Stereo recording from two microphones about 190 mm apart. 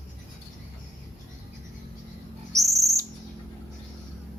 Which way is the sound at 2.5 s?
15° right (ahead or behind).